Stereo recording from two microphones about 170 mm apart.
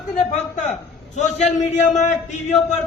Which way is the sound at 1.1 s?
45° left (ahead or behind).